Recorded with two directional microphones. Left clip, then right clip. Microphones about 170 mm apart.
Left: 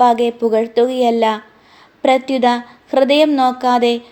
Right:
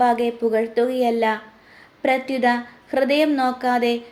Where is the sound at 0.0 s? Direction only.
30° left (ahead or behind).